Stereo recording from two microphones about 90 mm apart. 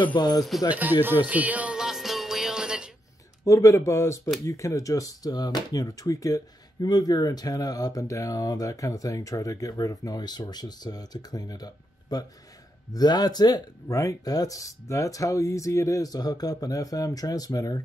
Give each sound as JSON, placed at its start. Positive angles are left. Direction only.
{"t": 0.0, "sound": "speech", "side_deg": 60}
{"t": 0.7, "sound": "speech", "side_deg": -20}
{"t": 1.0, "sound": "jingle bell", "side_deg": -20}
{"t": 3.4, "sound": "speech", "side_deg": 35}